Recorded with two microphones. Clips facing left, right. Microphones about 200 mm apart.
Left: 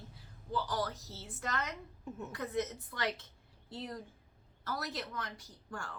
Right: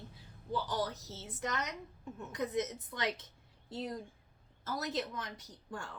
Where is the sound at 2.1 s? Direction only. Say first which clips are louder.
Left 3 dB; 5° left (ahead or behind).